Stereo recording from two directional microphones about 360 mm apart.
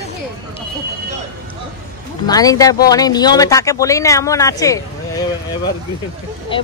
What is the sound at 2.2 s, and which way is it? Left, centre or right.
Speech, centre.